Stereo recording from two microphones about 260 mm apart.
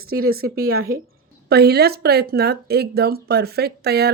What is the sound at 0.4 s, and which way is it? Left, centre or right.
Speech, right.